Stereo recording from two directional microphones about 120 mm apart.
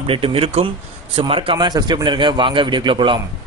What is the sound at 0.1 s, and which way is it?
A man's voice, 50° right (ahead or behind).